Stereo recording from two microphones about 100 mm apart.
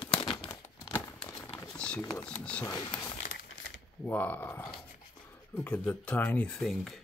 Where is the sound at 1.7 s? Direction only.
10° left (ahead or behind).